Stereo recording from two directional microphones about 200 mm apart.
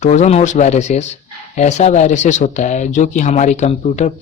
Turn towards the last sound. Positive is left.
turn(degrees=35)  # may be behind; listen again after turning